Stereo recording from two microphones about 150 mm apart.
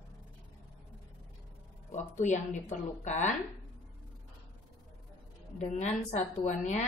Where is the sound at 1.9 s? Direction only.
55° left (ahead or behind).